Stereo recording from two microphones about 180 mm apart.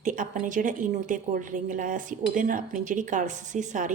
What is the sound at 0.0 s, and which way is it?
A woman's voice, 45° right (ahead or behind).